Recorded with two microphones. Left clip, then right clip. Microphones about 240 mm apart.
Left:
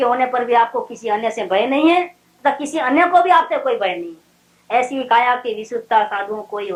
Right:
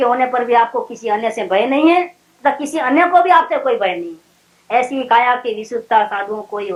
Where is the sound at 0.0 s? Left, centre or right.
Right.